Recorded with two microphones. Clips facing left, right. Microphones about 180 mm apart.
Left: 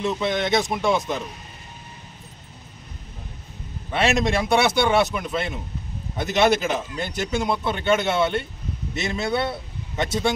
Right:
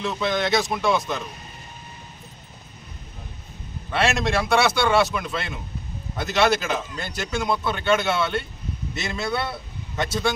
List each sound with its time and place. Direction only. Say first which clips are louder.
0.0 s speech: left 1 dB; 20° left (ahead or behind)
3.9 s speech: left 1 dB; 20° left (ahead or behind)